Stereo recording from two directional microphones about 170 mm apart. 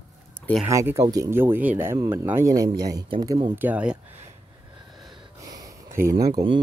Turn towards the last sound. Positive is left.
turn(degrees=-25)  # may be behind; listen again after turning